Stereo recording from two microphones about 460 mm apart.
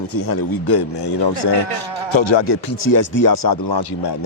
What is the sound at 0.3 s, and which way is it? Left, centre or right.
Speech, left.